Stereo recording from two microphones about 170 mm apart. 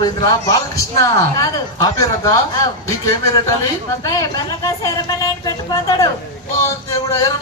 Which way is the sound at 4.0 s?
20° left (ahead or behind).